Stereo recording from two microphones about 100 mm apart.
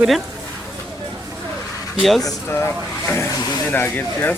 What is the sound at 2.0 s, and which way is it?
Speech, centre (ahead or behind).